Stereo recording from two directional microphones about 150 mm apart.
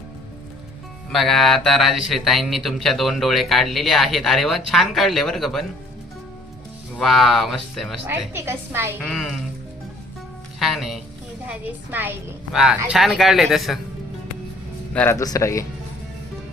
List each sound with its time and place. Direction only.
1.1 s speech: centre (ahead or behind)
7.0 s speech: centre (ahead or behind)
8.3 s a woman's voice: 15° right (ahead or behind)
9.0 s speech: 5° left (ahead or behind)
10.6 s a woman's voice: centre (ahead or behind)
14.9 s speech: 15° left (ahead or behind)